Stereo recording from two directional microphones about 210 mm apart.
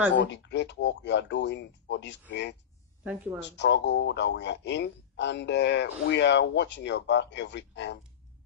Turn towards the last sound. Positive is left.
turn(degrees=55)  # may be behind; listen again after turning